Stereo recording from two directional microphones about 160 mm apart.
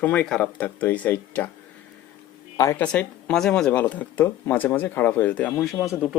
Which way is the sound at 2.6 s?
20° left (ahead or behind).